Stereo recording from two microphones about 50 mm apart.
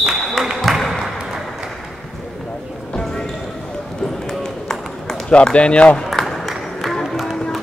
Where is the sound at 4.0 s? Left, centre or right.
Centre.